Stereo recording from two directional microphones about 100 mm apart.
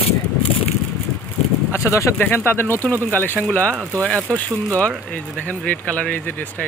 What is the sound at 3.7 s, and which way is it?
Speech, 25° right (ahead or behind).